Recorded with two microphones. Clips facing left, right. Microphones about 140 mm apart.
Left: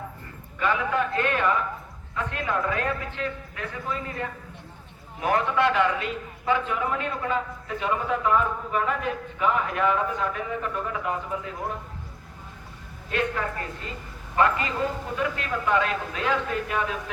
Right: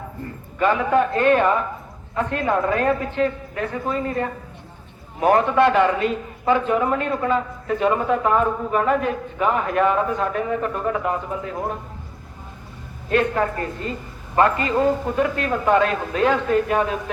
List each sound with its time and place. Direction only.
0.6 s a man's voice: 40° right (ahead or behind)
13.1 s a man's voice: 45° right (ahead or behind)